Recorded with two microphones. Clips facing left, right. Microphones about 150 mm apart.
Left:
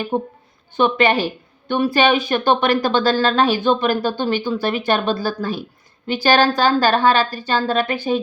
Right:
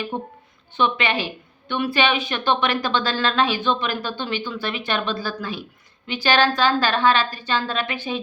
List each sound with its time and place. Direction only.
0.1 s a woman's voice: 45° left (ahead or behind)